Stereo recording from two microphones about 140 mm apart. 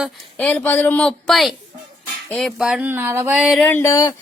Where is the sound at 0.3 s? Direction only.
10° left (ahead or behind).